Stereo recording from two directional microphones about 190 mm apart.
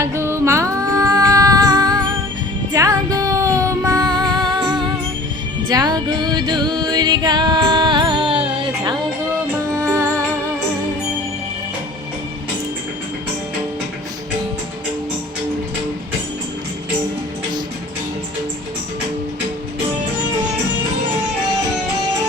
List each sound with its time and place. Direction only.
0.0 s music: 15° right (ahead or behind)